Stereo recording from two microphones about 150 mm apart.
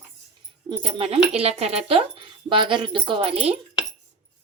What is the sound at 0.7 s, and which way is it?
Speech, 35° right (ahead or behind).